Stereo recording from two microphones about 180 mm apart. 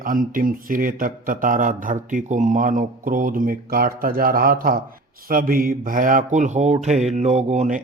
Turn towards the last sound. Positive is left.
turn(degrees=-40)  # may be behind; listen again after turning